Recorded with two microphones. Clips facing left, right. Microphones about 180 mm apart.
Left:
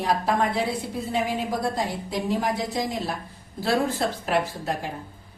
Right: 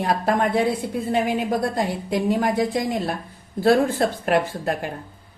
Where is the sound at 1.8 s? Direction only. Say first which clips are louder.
Right 5 dB; 55° right (ahead or behind).